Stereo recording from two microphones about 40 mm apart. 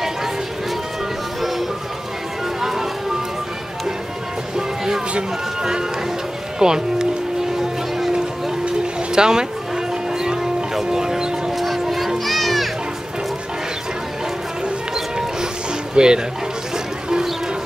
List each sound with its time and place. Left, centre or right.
2.6 s music: centre
4.6 s music: centre
5.6 s speech: centre
9.1 s speech: centre
10.1 s music: centre
11.5 s fowl: centre
12.3 s music: centre
15.9 s speech: right